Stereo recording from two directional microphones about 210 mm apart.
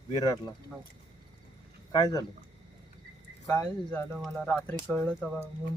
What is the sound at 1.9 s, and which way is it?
Speech, 20° left (ahead or behind).